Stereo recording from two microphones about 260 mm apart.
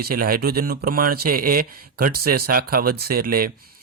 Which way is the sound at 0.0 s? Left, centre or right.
Right.